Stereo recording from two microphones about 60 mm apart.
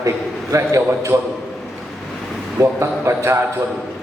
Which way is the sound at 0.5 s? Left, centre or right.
Right.